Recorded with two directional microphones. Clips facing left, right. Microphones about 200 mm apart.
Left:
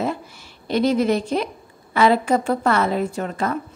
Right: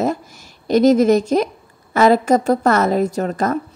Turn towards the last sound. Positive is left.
turn(degrees=-45)  # may be behind; listen again after turning